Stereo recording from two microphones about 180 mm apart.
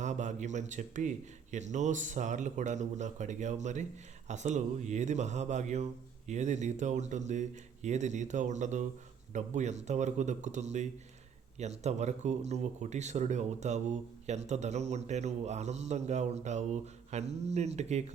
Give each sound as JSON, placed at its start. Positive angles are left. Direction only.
{"t": 0.0, "sound": "speech", "side_deg": -40}